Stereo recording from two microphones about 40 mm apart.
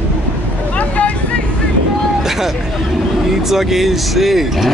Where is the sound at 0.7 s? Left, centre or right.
Left.